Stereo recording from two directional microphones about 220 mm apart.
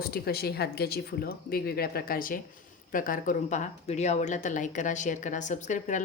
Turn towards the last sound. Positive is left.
turn(degrees=35)  # may be behind; listen again after turning